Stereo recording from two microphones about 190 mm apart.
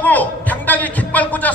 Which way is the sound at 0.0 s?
10° left (ahead or behind).